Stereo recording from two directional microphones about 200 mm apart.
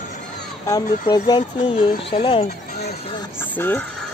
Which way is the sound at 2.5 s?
50° left (ahead or behind).